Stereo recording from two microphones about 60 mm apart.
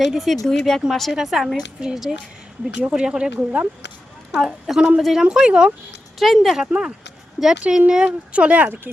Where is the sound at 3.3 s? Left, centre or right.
Right.